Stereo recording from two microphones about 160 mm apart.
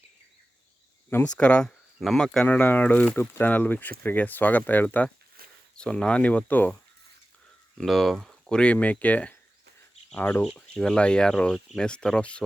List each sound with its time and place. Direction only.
1.4 s speech: 10° left (ahead or behind)
5.4 s a sound: 65° right (ahead or behind)
5.7 s speech: 5° left (ahead or behind)
7.8 s speech: centre (ahead or behind)